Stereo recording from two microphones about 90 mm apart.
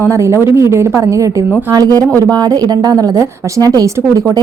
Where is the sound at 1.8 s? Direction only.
45° right (ahead or behind).